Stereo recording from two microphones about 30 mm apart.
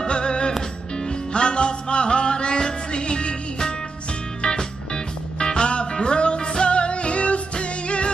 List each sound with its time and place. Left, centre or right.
0.0 s music: left
4.4 s music: left